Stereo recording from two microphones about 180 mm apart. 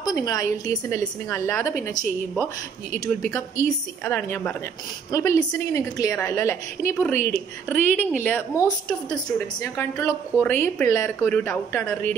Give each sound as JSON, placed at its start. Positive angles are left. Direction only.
{"t": 0.0, "sound": "a woman's voice", "side_deg": 20}
{"t": 3.6, "sound": "a woman's voice", "side_deg": 15}